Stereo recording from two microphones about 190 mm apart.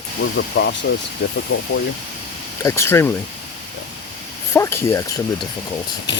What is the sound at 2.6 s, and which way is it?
Speech, 15° left (ahead or behind).